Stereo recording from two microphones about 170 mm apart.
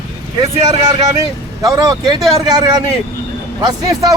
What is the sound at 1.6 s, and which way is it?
A man's voice, 25° right (ahead or behind).